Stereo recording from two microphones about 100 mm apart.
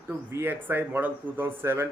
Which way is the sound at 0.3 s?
25° right (ahead or behind).